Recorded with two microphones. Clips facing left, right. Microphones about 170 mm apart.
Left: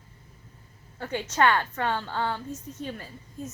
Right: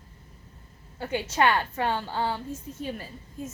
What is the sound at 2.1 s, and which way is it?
Speech, 30° right (ahead or behind).